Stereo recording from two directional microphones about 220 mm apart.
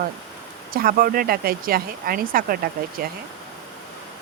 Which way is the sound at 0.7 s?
40° right (ahead or behind).